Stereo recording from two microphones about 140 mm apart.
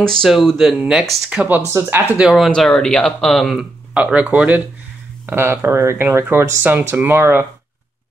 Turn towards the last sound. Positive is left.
turn(degrees=-15)  # may be behind; listen again after turning